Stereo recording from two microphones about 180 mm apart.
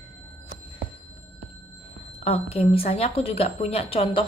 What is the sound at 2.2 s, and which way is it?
Speech, 35° left (ahead or behind).